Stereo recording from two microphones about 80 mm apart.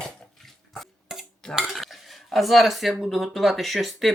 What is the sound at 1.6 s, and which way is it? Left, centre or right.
Speech, centre.